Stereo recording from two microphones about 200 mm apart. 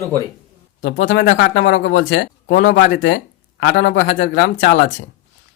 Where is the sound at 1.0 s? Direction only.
65° left (ahead or behind).